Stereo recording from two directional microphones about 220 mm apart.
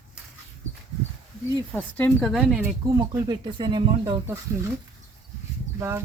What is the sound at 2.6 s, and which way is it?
Speech, 10° right (ahead or behind).